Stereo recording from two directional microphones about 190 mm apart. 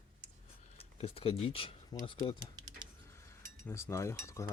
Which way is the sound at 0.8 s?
30° left (ahead or behind).